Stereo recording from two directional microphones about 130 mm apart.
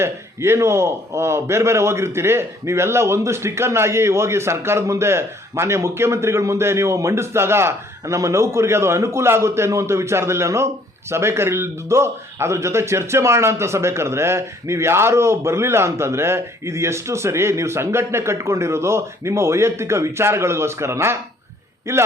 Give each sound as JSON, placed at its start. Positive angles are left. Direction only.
{"t": 0.0, "sound": "a man's voice", "side_deg": -20}